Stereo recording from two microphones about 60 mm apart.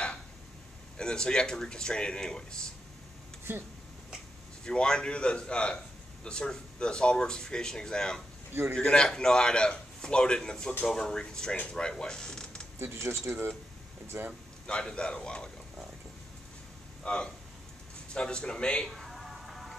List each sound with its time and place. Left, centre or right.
0.9 s a man's voice: centre
4.6 s a man's voice: centre
12.7 s speech: right
14.7 s a man's voice: centre
17.0 s a man's voice: centre
18.9 s music: centre